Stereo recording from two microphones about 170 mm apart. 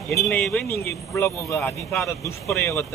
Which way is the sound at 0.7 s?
15° left (ahead or behind).